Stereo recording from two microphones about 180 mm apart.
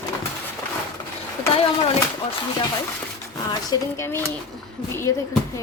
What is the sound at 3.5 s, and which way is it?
Speech, 20° left (ahead or behind).